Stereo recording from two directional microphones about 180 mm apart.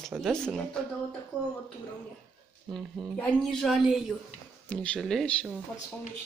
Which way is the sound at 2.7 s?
Centre (ahead or behind).